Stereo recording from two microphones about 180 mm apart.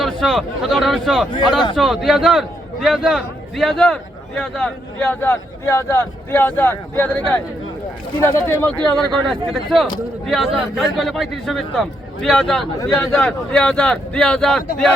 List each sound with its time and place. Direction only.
0.0 s a man's voice: centre (ahead or behind)
1.3 s speech: 25° left (ahead or behind)
1.7 s a man's voice: centre (ahead or behind)